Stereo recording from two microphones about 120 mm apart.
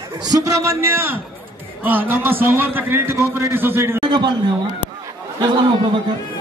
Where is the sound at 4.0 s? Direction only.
40° right (ahead or behind).